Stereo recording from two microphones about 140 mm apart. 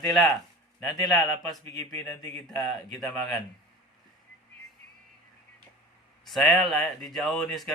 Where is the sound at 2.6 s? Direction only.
Centre (ahead or behind).